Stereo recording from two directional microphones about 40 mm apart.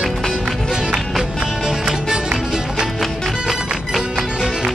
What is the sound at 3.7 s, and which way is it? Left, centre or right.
Music, centre.